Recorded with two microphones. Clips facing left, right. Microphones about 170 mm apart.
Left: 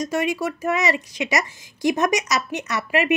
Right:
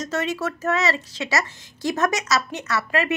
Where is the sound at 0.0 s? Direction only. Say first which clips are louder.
Left 2 dB; 10° left (ahead or behind).